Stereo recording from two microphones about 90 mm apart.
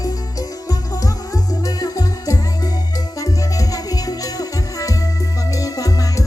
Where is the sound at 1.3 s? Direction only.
45° left (ahead or behind).